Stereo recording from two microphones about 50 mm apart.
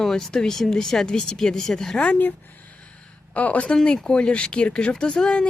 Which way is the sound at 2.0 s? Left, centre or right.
Left.